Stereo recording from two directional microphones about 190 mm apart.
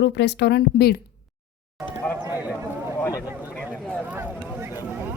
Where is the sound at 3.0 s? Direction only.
20° left (ahead or behind).